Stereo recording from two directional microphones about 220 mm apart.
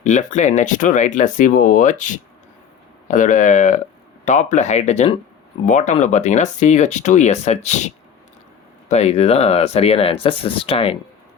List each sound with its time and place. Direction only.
0.0 s speech: 35° left (ahead or behind)
8.9 s speech: 30° left (ahead or behind)